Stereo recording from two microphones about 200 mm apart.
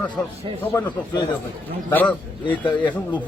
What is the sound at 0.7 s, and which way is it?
Speech, 20° left (ahead or behind).